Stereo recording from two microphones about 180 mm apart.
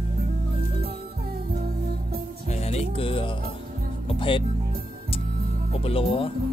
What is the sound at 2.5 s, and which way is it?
Music, 35° left (ahead or behind).